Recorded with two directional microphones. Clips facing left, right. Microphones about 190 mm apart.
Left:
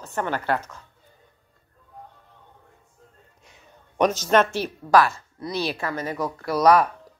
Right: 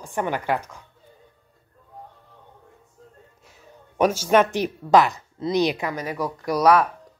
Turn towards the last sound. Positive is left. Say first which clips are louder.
# even
turn(degrees=-5)  # may be behind; listen again after turning